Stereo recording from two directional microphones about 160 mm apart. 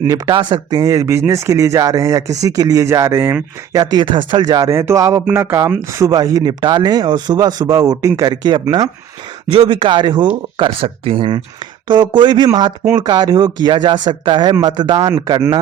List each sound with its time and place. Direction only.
0.0 s speech: 25° right (ahead or behind)